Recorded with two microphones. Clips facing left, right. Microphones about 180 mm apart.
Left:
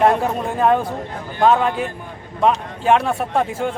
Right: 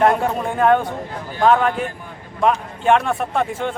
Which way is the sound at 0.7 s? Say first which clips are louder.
Right 3 dB; 5° left (ahead or behind).